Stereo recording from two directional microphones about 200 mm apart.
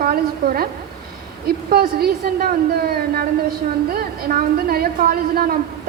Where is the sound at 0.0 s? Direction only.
45° right (ahead or behind).